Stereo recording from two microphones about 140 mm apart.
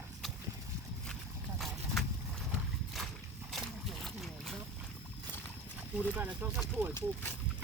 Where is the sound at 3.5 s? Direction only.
Centre (ahead or behind).